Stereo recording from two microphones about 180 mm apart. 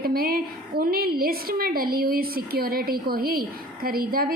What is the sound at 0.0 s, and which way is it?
A woman's voice, 55° right (ahead or behind).